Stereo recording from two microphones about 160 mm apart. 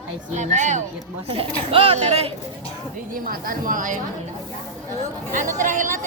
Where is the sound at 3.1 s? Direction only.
60° right (ahead or behind).